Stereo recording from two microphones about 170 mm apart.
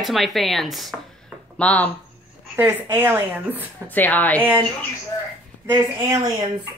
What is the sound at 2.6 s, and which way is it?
Speech, 15° right (ahead or behind).